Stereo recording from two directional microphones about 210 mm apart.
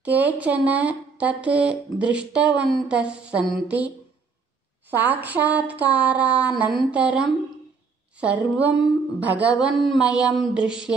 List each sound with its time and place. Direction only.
0.0 s speech: 5° right (ahead or behind)
4.9 s speech: 10° right (ahead or behind)
8.5 s mantra: 5° right (ahead or behind)